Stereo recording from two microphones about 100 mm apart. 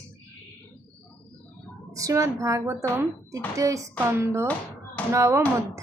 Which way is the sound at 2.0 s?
30° right (ahead or behind).